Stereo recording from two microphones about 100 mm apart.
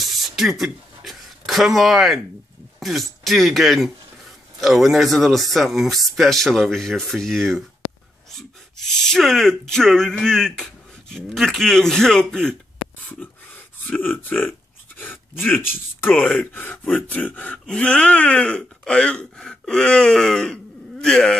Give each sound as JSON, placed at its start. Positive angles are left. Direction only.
{"t": 0.0, "sound": "a sound", "side_deg": 0}
{"t": 2.8, "sound": "speech", "side_deg": 0}
{"t": 13.8, "sound": "speech", "side_deg": 15}